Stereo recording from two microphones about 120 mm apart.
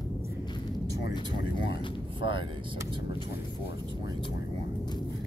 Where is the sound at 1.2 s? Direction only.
40° left (ahead or behind).